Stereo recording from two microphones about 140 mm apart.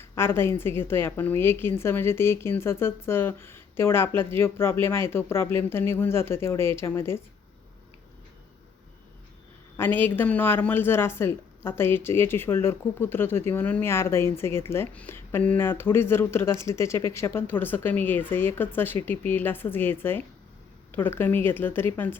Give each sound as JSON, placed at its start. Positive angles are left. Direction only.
{"t": 0.0, "sound": "speech", "side_deg": 15}
{"t": 9.7, "sound": "speech", "side_deg": 15}